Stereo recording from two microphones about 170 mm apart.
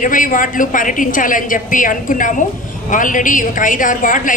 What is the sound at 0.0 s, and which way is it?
A woman's voice, 50° left (ahead or behind).